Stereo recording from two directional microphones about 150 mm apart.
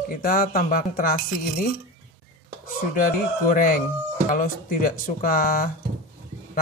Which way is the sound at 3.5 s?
65° left (ahead or behind).